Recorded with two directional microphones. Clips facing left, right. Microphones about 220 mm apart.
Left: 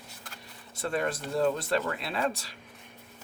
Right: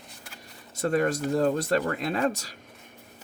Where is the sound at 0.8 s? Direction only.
40° right (ahead or behind).